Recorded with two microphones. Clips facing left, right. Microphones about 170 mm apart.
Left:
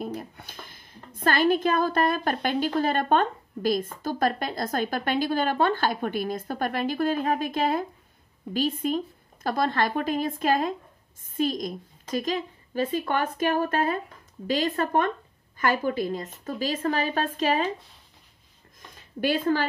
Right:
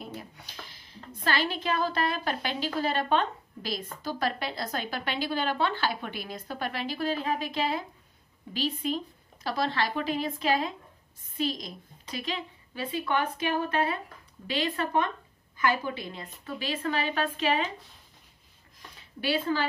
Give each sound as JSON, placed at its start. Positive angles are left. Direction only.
{"t": 0.0, "sound": "a woman's voice", "side_deg": 50}
{"t": 18.9, "sound": "speech", "side_deg": 50}